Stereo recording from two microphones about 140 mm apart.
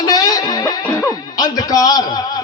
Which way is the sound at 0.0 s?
30° left (ahead or behind).